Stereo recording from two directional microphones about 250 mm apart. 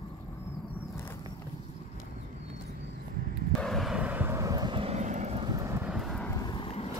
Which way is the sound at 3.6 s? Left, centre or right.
Centre.